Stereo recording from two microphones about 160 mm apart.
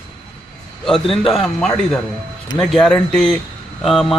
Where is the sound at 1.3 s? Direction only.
Centre (ahead or behind).